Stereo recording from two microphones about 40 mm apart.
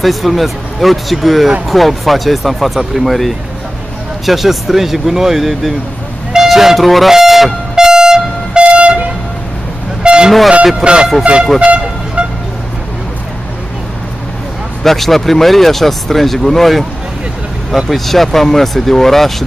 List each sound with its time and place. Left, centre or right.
0.0 s speech: centre
6.3 s toot: centre
6.8 s speech: centre
7.7 s vehicle: centre
8.7 s train: right
10.8 s speech: right
11.6 s vehicle: right
14.8 s speech: centre
17.8 s speech: centre